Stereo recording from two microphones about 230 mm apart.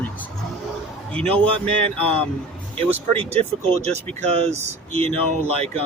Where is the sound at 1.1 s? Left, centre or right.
Centre.